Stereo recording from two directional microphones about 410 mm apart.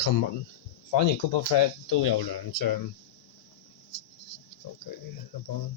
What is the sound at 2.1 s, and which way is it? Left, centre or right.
Speech, left.